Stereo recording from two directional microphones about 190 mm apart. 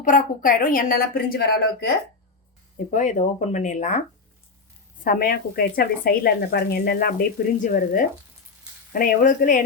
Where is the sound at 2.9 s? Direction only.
40° left (ahead or behind).